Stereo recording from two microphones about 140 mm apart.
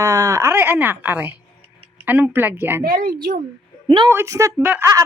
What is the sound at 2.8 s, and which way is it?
Speech, 90° right.